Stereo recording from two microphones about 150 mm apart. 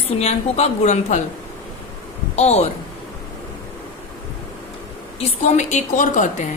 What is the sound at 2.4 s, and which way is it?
Speech, 45° left (ahead or behind).